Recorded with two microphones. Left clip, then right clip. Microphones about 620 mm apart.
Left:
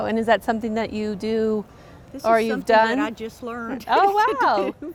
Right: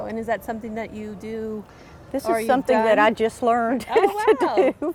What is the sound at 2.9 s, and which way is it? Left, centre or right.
Speech, right.